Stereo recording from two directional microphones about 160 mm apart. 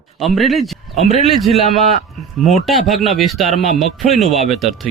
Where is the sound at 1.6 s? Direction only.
45° left (ahead or behind).